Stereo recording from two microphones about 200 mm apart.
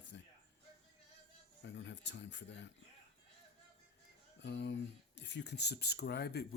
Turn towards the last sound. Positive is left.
turn(degrees=55)  # may be behind; listen again after turning